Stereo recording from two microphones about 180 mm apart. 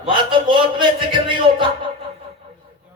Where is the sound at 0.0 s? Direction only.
25° right (ahead or behind).